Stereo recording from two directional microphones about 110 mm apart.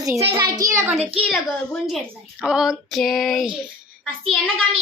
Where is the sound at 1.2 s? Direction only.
5° left (ahead or behind).